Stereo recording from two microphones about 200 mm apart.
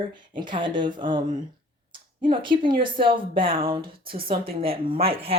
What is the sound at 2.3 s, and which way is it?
Speech, 25° right (ahead or behind).